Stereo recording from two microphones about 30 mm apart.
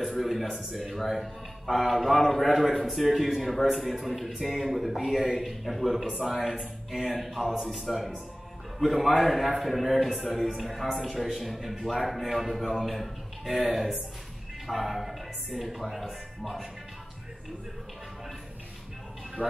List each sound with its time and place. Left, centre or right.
0.2 s a man's voice: centre
19.4 s speech: left